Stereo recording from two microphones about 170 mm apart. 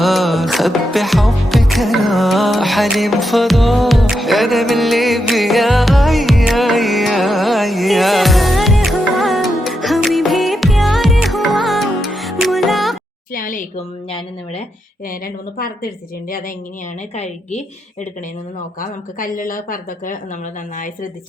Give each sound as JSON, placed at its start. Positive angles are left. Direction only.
{"t": 0.0, "sound": "music", "side_deg": 0}
{"t": 13.3, "sound": "a sound", "side_deg": 55}
{"t": 13.7, "sound": "speech", "side_deg": 35}
{"t": 15.5, "sound": "a woman's voice", "side_deg": 60}
{"t": 17.2, "sound": "speech", "side_deg": 40}
{"t": 19.2, "sound": "a woman's voice", "side_deg": 55}